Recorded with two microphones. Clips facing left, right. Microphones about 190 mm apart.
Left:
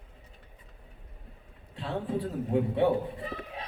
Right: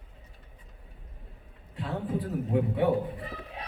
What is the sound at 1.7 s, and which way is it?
A man's voice, 25° left (ahead or behind).